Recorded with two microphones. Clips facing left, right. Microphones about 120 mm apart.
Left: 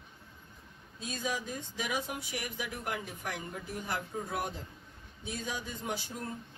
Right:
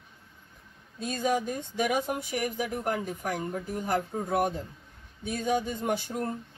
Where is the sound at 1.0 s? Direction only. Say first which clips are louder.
Right 8 dB; 50° right (ahead or behind).